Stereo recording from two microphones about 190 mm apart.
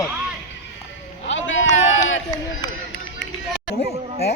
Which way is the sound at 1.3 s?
80° left.